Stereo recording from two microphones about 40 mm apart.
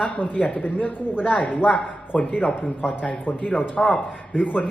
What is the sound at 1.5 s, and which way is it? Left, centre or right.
Speech, left.